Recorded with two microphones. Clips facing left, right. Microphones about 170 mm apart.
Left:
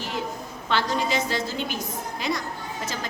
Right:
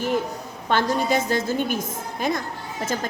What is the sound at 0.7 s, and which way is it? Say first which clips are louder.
A woman's voice: right 4 dB; 50° right (ahead or behind).